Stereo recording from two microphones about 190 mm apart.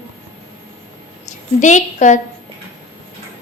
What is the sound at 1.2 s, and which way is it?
Speech, 40° left (ahead or behind).